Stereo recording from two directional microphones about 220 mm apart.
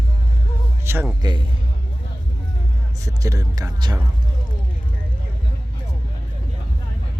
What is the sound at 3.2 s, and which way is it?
Speech, 15° right (ahead or behind).